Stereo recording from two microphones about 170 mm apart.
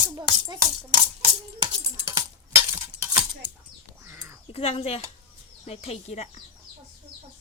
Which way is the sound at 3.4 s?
10° right (ahead or behind).